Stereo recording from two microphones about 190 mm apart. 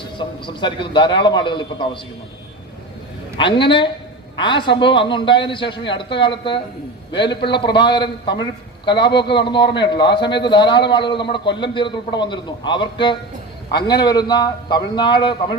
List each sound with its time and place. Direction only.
0.2 s a man's voice: 25° left (ahead or behind)
3.3 s a man's voice: 25° left (ahead or behind)